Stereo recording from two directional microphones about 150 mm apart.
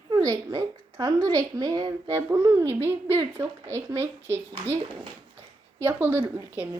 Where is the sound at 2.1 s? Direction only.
15° right (ahead or behind).